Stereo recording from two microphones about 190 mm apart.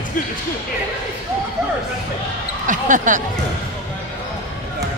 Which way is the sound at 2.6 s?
40° right (ahead or behind).